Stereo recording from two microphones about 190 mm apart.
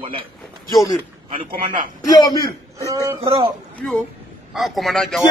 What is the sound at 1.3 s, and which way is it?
Speech, 45° right (ahead or behind).